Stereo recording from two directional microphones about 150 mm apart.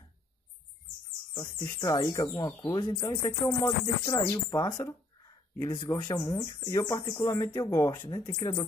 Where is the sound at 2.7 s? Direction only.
30° left (ahead or behind).